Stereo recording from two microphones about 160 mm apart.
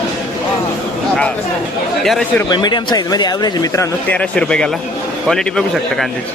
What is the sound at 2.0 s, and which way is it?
Speech, centre (ahead or behind).